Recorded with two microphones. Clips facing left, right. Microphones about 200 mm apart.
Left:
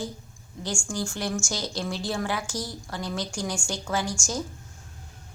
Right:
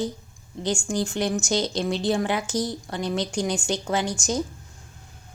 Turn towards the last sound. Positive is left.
turn(degrees=-20)  # may be behind; listen again after turning